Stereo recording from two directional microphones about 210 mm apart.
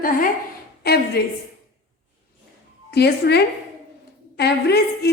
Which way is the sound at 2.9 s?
50° left (ahead or behind).